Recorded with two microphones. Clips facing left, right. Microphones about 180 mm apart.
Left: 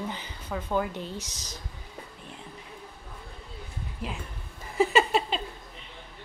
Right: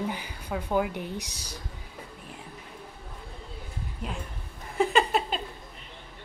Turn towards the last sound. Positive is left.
turn(degrees=0)  # may be behind; listen again after turning